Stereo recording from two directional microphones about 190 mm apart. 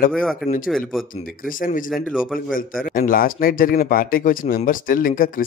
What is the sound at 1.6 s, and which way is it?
Speech, 45° left (ahead or behind).